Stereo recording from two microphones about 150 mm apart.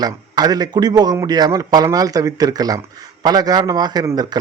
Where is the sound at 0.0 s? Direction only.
25° right (ahead or behind).